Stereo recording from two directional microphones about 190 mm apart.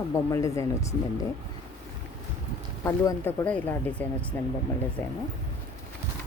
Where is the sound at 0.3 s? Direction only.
15° left (ahead or behind).